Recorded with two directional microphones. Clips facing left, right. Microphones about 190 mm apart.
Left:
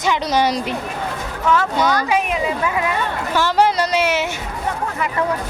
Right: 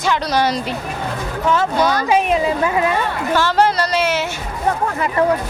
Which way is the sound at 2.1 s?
30° right (ahead or behind).